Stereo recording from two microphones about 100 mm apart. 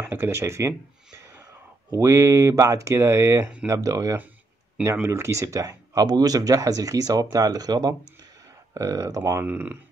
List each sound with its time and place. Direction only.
0.1 s speech: 25° right (ahead or behind)